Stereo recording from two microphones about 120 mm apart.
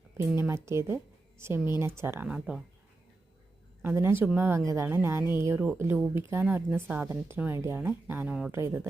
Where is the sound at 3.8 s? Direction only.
20° right (ahead or behind).